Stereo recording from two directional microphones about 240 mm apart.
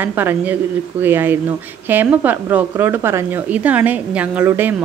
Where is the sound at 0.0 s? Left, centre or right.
Centre.